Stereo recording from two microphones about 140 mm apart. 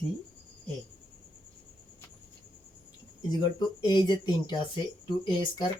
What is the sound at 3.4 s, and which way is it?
Speech, 30° left (ahead or behind).